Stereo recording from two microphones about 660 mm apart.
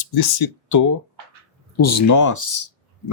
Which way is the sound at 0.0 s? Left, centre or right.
Left.